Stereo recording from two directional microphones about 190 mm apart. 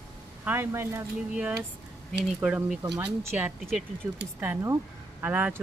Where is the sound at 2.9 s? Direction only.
15° right (ahead or behind).